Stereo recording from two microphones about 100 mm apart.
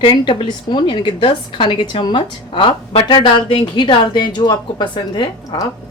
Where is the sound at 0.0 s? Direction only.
55° left (ahead or behind).